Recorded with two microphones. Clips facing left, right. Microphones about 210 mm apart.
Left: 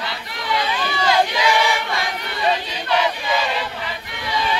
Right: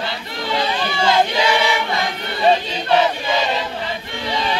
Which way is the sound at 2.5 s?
30° right (ahead or behind).